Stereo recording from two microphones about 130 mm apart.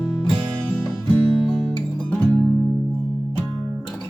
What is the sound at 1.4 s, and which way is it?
Guitar, centre (ahead or behind).